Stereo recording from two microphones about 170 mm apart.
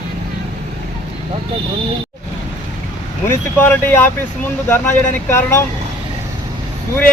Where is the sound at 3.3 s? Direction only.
15° left (ahead or behind).